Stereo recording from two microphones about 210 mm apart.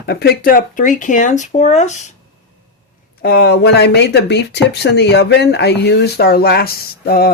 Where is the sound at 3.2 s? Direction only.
50° left (ahead or behind).